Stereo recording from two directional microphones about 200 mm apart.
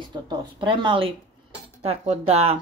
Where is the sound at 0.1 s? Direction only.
20° right (ahead or behind).